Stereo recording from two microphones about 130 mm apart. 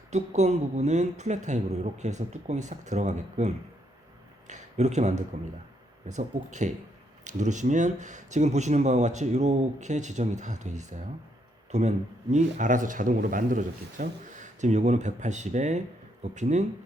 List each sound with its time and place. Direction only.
0.1 s speech: 60° right (ahead or behind)
4.4 s a sound: 65° right (ahead or behind)
6.1 s speech: 65° right (ahead or behind)